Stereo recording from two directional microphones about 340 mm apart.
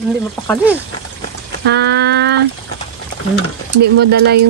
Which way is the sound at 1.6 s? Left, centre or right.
Right.